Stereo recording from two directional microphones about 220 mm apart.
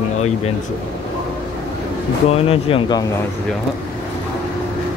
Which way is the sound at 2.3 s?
25° left (ahead or behind).